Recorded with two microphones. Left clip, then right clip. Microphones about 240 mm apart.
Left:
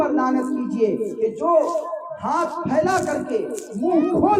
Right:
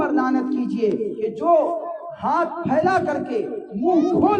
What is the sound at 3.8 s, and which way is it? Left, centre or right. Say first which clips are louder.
Speech: right 1 dB; centre.